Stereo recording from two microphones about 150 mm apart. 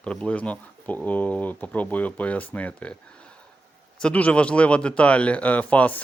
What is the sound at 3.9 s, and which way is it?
Speech, 10° left (ahead or behind).